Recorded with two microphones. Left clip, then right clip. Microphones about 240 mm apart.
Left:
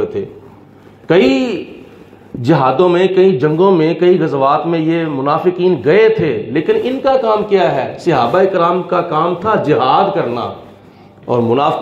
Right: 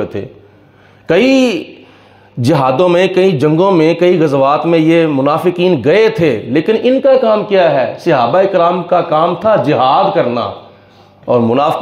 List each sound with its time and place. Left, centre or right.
0.2 s a man's voice: right